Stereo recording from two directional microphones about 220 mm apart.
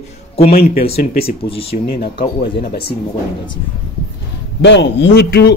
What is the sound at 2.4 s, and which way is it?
Speech, 45° left (ahead or behind).